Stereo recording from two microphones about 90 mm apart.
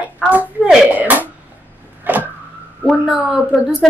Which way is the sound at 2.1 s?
20° right (ahead or behind).